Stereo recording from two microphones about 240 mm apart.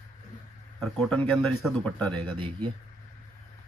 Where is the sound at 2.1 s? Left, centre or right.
Right.